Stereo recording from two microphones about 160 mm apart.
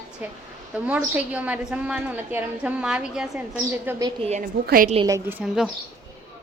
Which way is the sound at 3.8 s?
20° right (ahead or behind).